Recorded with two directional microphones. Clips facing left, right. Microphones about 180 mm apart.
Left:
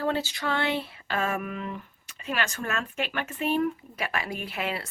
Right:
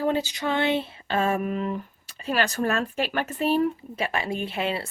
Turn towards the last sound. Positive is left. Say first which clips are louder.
# right 4 dB
turn(degrees=-25)  # may be behind; listen again after turning